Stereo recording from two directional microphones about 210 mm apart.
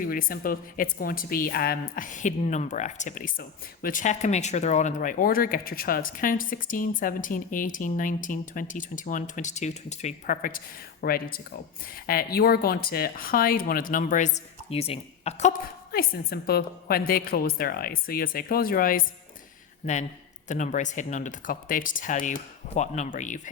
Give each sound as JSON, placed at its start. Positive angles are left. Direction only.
{"t": 0.0, "sound": "a woman's voice", "side_deg": 40}
{"t": 15.9, "sound": "a woman's voice", "side_deg": 45}